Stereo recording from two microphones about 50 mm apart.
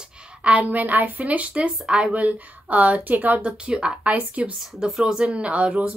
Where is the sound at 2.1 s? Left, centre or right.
Right.